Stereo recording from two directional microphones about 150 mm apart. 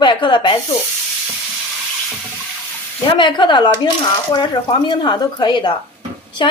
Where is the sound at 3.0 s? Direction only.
35° left (ahead or behind).